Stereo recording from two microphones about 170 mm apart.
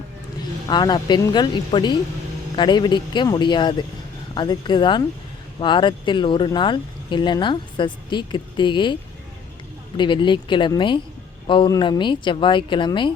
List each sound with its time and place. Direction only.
0.7 s speech: 25° left (ahead or behind)
10.0 s speech: 30° left (ahead or behind)